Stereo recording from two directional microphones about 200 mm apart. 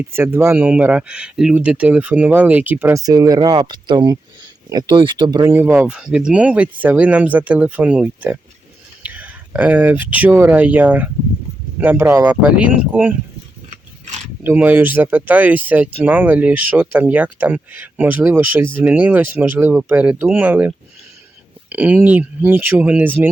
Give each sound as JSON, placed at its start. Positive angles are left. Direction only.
{"t": 0.1, "sound": "speech", "side_deg": -10}
{"t": 13.7, "sound": "mechanisms", "side_deg": -35}
{"t": 14.4, "sound": "speech", "side_deg": -10}